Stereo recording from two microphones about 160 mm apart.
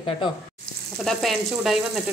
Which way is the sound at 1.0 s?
Centre (ahead or behind).